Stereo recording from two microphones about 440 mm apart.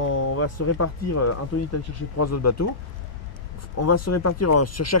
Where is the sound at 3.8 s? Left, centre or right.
Left.